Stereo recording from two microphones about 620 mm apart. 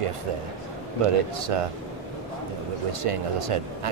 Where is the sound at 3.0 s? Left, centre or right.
Right.